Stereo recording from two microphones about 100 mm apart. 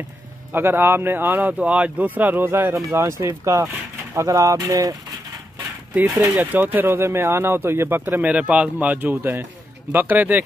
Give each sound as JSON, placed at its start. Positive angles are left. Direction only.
{"t": 0.5, "sound": "speech", "side_deg": -20}
{"t": 5.9, "sound": "speech", "side_deg": -20}